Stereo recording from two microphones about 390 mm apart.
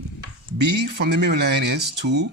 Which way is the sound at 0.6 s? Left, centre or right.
Right.